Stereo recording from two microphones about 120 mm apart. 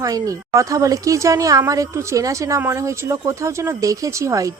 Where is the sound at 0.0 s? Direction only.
30° right (ahead or behind).